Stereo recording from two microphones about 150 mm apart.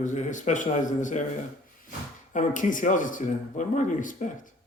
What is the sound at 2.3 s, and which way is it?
Speech, 60° left (ahead or behind).